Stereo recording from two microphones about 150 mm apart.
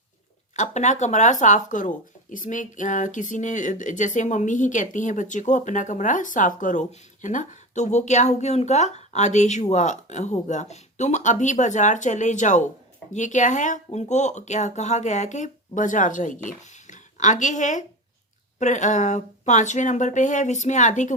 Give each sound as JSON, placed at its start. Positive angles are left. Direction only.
{"t": 0.5, "sound": "speech", "side_deg": 55}